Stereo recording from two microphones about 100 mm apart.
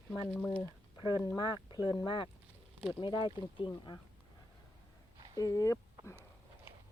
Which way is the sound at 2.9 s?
55° left (ahead or behind).